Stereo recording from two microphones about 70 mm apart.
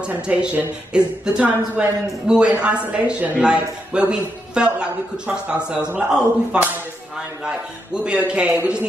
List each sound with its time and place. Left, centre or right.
0.0 s a man's voice: centre